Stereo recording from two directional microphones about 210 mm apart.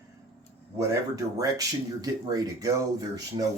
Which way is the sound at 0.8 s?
15° right (ahead or behind).